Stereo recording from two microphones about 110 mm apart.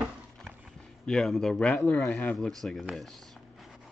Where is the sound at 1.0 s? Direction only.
5° left (ahead or behind).